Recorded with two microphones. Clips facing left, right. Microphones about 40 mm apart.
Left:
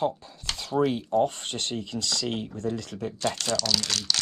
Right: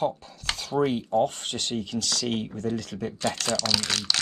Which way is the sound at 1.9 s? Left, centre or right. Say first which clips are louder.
Right 1 dB; right.